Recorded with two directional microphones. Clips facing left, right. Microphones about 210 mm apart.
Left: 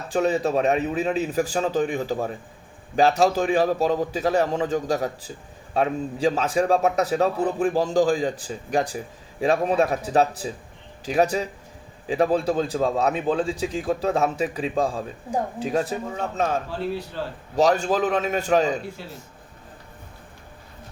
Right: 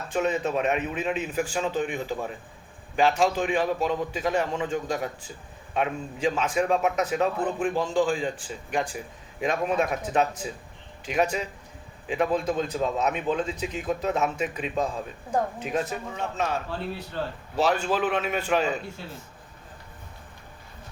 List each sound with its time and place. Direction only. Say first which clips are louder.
0.1 s a man's voice: left 4 dB; 35° left (ahead or behind)
17.6 s a man's voice: left 4 dB; 40° left (ahead or behind)